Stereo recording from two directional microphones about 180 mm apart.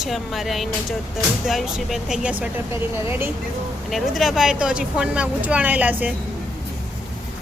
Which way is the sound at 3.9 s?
Centre (ahead or behind).